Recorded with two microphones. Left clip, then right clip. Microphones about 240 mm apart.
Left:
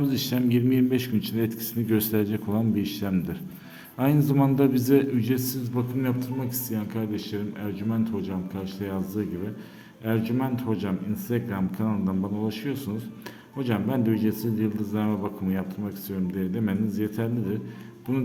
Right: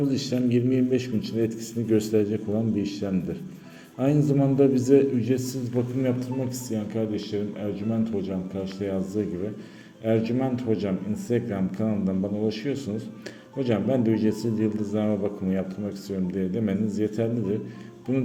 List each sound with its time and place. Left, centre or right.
0.0 s a man's voice: left
10.1 s a man's voice: centre